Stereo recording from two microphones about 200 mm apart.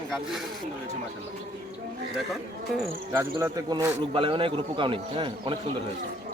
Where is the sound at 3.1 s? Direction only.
10° right (ahead or behind).